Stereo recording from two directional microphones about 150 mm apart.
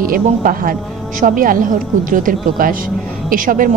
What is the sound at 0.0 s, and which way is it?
A woman's voice, 70° right (ahead or behind).